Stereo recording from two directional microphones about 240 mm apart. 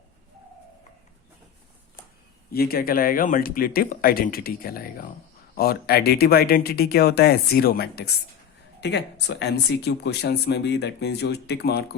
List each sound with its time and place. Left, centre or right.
2.5 s speech: left